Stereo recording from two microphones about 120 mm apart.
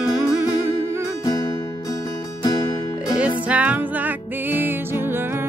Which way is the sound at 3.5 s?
15° right (ahead or behind).